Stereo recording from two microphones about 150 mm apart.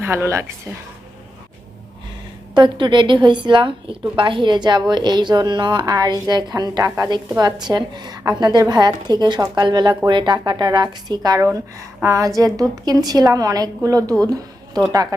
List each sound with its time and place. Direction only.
0.0 s a woman's voice: 15° right (ahead or behind)
2.6 s a woman's voice: 30° right (ahead or behind)